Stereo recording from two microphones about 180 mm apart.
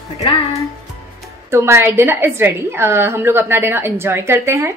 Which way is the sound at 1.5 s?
15° right (ahead or behind).